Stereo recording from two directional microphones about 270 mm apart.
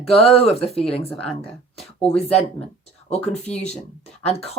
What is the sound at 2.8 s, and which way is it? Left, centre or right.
Speech, left.